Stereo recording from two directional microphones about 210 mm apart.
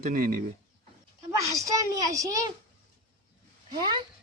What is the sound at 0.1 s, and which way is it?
Speech, 40° right (ahead or behind).